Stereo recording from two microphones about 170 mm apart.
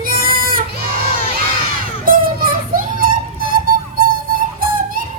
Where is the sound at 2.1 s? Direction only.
55° right (ahead or behind).